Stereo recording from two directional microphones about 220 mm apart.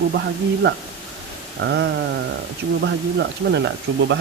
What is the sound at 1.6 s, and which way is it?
Speech, 55° right (ahead or behind).